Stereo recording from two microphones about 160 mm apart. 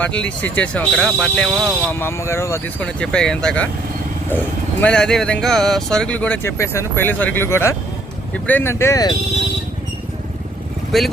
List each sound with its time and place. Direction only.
0.0 s speech: 10° left (ahead or behind)
2.8 s speech: 5° left (ahead or behind); by 9.1 s 20° left (ahead or behind)
10.9 s speech: centre (ahead or behind)